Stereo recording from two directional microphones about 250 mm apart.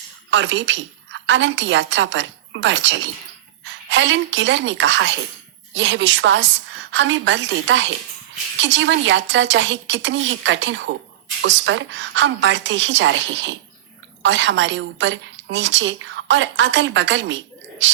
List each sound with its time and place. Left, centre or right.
0.3 s a woman's voice: right